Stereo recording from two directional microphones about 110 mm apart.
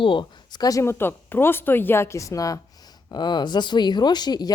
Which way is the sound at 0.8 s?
20° left (ahead or behind).